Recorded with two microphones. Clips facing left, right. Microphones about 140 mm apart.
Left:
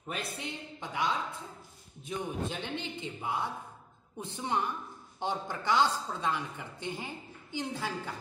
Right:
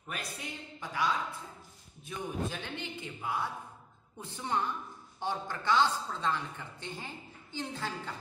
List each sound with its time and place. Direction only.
0.1 s a man's voice: 25° left (ahead or behind)